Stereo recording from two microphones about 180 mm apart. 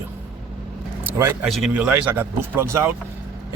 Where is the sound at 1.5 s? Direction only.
5° right (ahead or behind).